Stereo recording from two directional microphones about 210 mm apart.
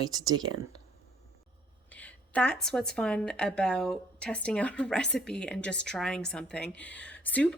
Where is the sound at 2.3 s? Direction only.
5° left (ahead or behind).